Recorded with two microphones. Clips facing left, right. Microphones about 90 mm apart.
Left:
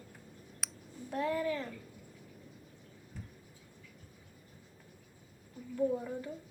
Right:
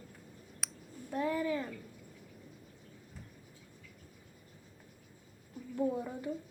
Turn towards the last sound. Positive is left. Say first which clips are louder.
# left 1 dB
turn(degrees=-25)  # may be behind; listen again after turning